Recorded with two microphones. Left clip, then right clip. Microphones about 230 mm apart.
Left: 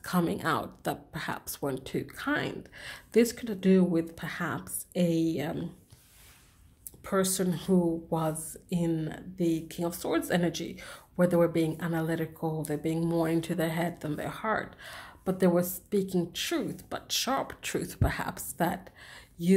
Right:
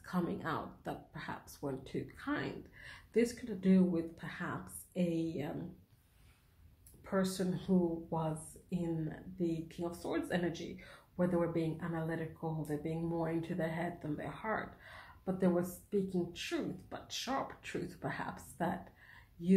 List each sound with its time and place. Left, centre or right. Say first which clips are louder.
0.0 s speech: left 9 dB; left
7.1 s speech: left 7 dB; left